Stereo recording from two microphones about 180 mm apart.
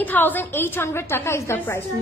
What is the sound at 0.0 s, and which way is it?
A woman's voice, 10° left (ahead or behind).